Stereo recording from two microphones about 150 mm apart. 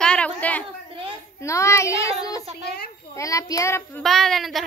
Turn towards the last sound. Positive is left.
turn(degrees=0)  # may be behind; listen again after turning